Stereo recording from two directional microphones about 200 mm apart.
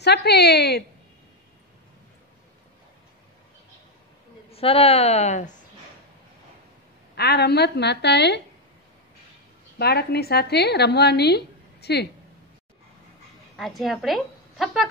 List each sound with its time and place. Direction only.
0.0 s a woman's voice: 55° left (ahead or behind)
4.5 s a woman's voice: 30° left (ahead or behind)
7.2 s a woman's voice: 55° left (ahead or behind)
9.8 s a woman's voice: 55° left (ahead or behind)
13.6 s a woman's voice: centre (ahead or behind)